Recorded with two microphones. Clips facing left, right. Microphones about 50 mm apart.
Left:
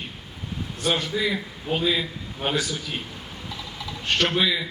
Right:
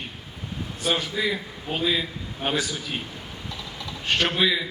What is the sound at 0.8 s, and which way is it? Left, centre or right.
A man's voice, centre.